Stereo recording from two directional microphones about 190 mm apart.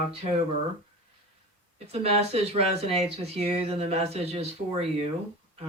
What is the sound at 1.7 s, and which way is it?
Speech, 35° right (ahead or behind).